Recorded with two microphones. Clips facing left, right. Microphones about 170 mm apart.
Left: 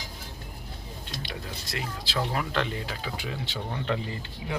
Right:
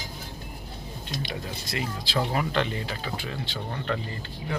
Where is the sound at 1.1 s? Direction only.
Centre (ahead or behind).